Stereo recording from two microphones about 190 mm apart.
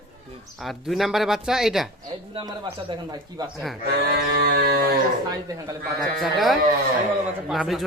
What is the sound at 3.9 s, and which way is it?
Mantra, 60° right (ahead or behind).